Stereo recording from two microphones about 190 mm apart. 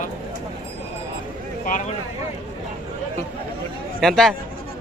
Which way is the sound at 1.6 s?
45° left (ahead or behind).